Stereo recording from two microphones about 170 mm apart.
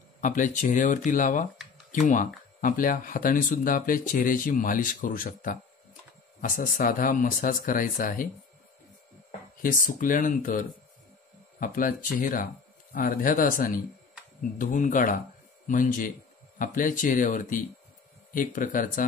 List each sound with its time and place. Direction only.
0.2 s speech: 50° left (ahead or behind)
9.6 s a man's voice: 55° left (ahead or behind)